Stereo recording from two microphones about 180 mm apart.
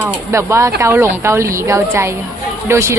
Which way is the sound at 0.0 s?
15° right (ahead or behind).